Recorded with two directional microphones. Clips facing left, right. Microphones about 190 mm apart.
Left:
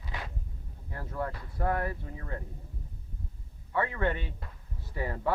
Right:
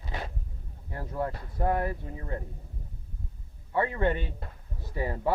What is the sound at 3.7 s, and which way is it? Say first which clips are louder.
Speech: right 3 dB; 20° right (ahead or behind).